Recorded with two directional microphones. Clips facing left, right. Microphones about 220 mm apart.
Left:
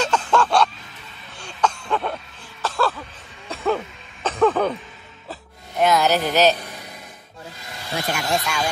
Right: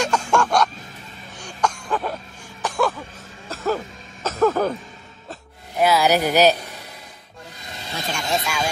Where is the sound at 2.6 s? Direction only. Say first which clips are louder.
Right 1 dB; 15° right (ahead or behind).